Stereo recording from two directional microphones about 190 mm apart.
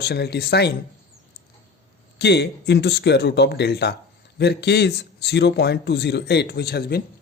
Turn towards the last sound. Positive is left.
turn(degrees=55)  # may be behind; listen again after turning